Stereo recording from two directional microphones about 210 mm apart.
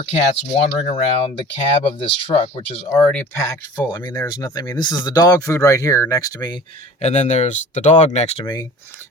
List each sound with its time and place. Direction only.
0.6 s speech: 30° left (ahead or behind)
3.0 s speech: 5° left (ahead or behind)
3.8 s speech: 20° left (ahead or behind)
7.0 s speech: 35° left (ahead or behind)